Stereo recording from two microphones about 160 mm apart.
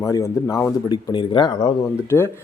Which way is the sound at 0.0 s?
20° left (ahead or behind).